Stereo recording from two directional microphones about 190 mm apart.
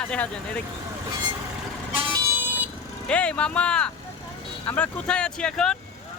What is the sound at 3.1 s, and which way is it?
Speech, 5° left (ahead or behind).